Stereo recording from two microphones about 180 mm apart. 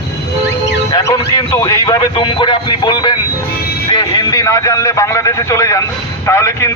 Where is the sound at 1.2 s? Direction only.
20° left (ahead or behind).